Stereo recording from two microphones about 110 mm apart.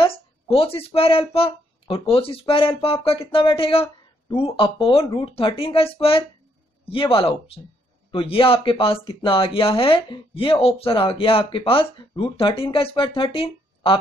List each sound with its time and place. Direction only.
0.0 s speech: 60° left (ahead or behind)